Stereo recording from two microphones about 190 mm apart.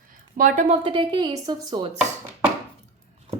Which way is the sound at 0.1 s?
45° right (ahead or behind).